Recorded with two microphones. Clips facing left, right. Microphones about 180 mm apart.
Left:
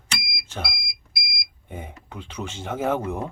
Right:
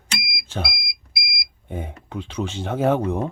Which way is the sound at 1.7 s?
15° right (ahead or behind).